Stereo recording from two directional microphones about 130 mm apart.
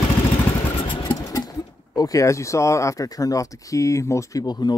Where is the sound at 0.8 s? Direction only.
40° left (ahead or behind).